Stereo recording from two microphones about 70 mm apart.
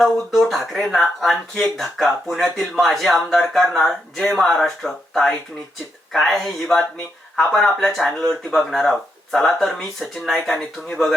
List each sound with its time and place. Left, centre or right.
0.3 s speech: centre